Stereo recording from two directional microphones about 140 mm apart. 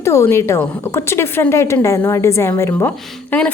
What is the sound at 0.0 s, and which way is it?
A woman's voice, 20° left (ahead or behind).